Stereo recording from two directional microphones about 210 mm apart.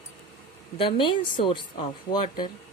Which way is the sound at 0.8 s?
25° left (ahead or behind).